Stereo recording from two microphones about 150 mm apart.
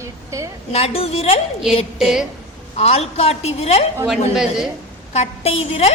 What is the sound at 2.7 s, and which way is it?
A woman's voice, 45° left (ahead or behind).